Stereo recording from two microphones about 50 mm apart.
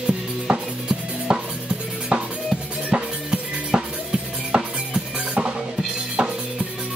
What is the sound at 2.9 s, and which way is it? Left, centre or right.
Music, centre.